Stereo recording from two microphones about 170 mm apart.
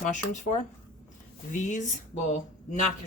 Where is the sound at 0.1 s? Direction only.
45° left (ahead or behind).